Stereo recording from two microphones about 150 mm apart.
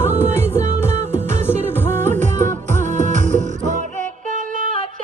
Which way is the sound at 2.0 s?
50° right (ahead or behind).